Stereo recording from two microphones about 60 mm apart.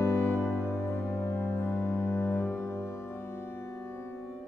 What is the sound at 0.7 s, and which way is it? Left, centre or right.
Music, left.